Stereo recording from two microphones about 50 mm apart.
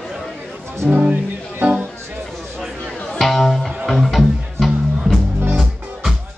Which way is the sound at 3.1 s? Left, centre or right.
Centre.